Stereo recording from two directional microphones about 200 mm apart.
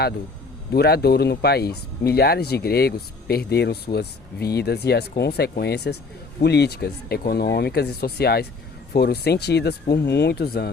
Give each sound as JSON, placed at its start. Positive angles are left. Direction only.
{"t": 0.7, "sound": "speech", "side_deg": 50}